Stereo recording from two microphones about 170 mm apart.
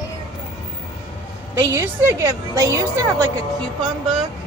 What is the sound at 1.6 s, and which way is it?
A woman's voice, 20° right (ahead or behind).